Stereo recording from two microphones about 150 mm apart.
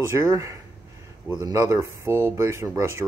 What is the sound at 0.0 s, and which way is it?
Speech, 20° right (ahead or behind).